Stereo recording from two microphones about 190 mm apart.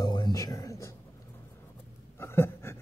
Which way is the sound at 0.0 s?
20° left (ahead or behind).